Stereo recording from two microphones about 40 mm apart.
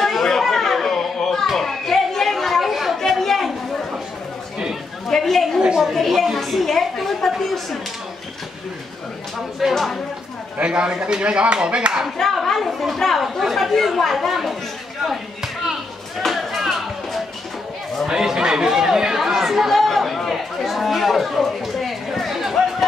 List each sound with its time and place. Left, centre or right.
0.0 s children playing: centre
1.5 s chatter: centre
5.1 s a sound: centre
9.6 s a woman's voice: centre
10.6 s speech: right
12.2 s a woman's voice: centre
13.2 s speech: centre
15.0 s a sound: centre
16.3 s music: centre
18.0 s chatter: centre
19.7 s chatter: centre